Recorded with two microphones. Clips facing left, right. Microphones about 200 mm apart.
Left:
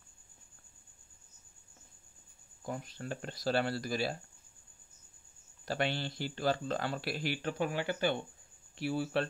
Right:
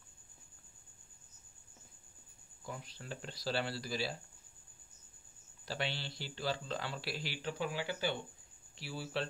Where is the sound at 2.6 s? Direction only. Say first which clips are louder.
Left 7 dB; 50° left (ahead or behind).